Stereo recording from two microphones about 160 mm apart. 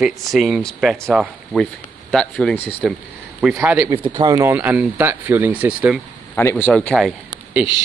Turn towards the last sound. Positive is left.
turn(degrees=-5)  # may be behind; listen again after turning